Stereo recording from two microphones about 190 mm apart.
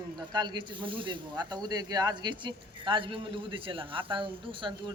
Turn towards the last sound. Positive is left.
turn(degrees=-25)  # may be behind; listen again after turning